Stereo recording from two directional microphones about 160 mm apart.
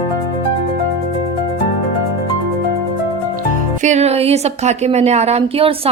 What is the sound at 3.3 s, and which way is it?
Speech, 50° right (ahead or behind).